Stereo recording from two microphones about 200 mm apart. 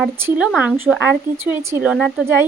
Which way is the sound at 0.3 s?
5° right (ahead or behind).